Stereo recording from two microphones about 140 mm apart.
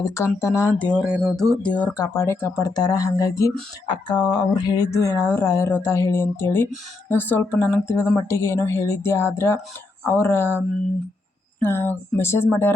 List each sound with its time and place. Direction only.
0.0 s speech: 20° left (ahead or behind)
1.0 s speech: 5° right (ahead or behind)
1.4 s speech: 5° left (ahead or behind)
2.0 s speech: 20° left (ahead or behind)
11.6 s speech: 15° left (ahead or behind)